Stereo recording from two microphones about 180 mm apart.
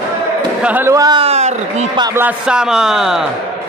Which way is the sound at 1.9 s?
25° right (ahead or behind).